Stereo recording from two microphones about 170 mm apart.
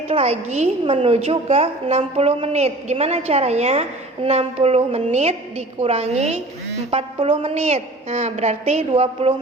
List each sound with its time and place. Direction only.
0.1 s a woman's voice: 35° right (ahead or behind)